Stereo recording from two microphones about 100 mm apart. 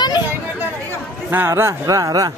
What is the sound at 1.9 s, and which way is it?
Speech, 35° right (ahead or behind).